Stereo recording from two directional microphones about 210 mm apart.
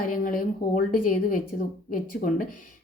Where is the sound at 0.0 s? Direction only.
40° left (ahead or behind).